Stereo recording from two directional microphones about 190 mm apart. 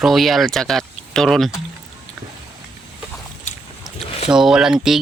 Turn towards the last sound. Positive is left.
turn(degrees=0)  # may be behind; listen again after turning